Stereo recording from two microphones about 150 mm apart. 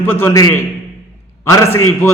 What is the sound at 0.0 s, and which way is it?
Speech, 15° left (ahead or behind).